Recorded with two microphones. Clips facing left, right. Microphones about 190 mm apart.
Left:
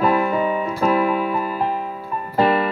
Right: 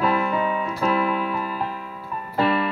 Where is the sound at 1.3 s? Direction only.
45° left (ahead or behind).